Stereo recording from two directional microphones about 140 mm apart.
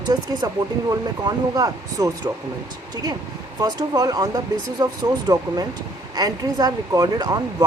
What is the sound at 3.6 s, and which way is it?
Speech, 25° right (ahead or behind).